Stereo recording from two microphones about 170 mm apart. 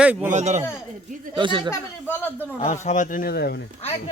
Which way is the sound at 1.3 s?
30° right (ahead or behind).